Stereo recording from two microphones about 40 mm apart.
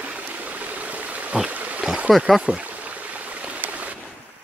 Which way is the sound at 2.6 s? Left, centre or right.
Right.